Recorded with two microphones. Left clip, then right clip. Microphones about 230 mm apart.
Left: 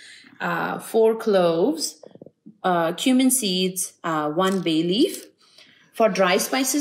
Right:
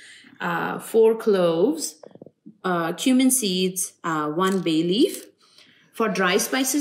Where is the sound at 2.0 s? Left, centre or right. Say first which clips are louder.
Even; left.